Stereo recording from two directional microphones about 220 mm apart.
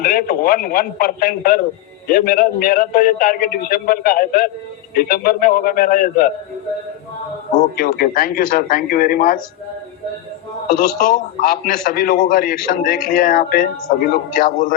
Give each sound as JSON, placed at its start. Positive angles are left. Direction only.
{"t": 0.0, "sound": "a man's voice", "side_deg": 40}
{"t": 7.8, "sound": "a man's voice", "side_deg": 40}
{"t": 10.7, "sound": "a man's voice", "side_deg": 40}